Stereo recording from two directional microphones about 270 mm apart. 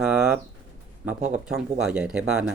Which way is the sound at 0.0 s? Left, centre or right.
Centre.